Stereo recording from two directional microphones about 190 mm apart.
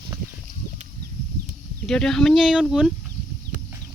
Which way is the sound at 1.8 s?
5° left (ahead or behind).